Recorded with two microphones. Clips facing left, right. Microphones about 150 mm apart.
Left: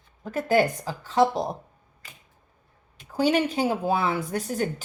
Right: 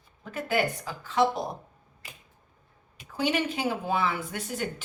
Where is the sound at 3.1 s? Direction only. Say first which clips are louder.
Left 5 dB; 40° left (ahead or behind).